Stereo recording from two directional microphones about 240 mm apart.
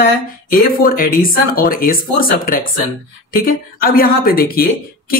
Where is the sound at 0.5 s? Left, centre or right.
Left.